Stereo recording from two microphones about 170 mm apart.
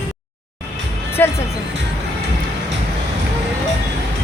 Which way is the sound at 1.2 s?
10° left (ahead or behind).